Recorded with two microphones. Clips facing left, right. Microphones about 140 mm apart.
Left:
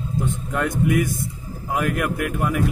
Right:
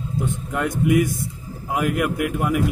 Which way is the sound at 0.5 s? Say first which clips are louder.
Right 2 dB; 15° right (ahead or behind).